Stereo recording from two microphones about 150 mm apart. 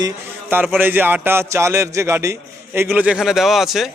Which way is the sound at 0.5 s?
15° right (ahead or behind).